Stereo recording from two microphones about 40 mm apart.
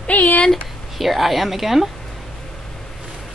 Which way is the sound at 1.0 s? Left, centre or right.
Centre.